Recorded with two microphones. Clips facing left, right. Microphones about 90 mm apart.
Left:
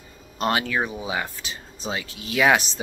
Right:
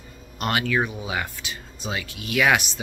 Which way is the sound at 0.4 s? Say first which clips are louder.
Even; 30° left (ahead or behind).